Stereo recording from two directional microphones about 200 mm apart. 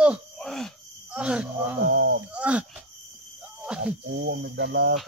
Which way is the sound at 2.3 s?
5° right (ahead or behind).